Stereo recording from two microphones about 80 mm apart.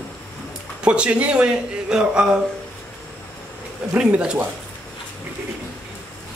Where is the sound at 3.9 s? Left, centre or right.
Centre.